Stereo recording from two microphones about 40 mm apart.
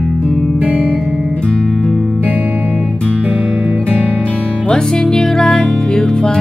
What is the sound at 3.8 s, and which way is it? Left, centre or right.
Music, right.